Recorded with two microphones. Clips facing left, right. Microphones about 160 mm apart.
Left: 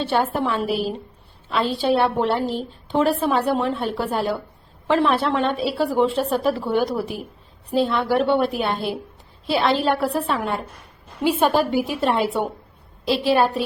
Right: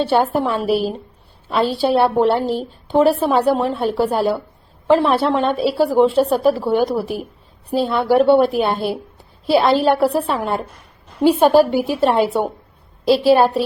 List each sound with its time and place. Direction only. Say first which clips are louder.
0.0 s a woman's voice: right 5 dB; 40° right (ahead or behind)